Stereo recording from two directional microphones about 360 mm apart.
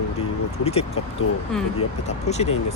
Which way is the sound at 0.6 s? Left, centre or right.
Centre.